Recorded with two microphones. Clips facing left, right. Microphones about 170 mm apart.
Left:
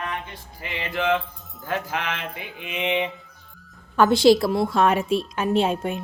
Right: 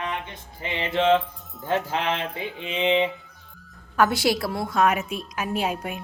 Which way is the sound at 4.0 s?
25° left (ahead or behind).